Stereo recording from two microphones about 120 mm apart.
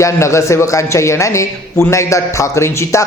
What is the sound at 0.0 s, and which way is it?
A man's voice, 25° left (ahead or behind).